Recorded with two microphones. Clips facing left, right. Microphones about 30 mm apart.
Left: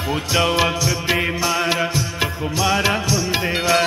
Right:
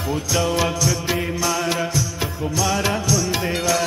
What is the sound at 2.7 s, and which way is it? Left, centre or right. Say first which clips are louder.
Music: left 3 dB; left.